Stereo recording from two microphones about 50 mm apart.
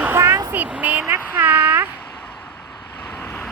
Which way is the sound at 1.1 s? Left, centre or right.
Right.